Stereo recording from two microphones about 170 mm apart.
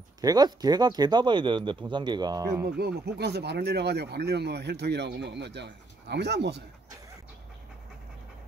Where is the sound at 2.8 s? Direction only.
75° right (ahead or behind).